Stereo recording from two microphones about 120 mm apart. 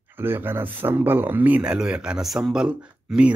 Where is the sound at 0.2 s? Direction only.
20° right (ahead or behind).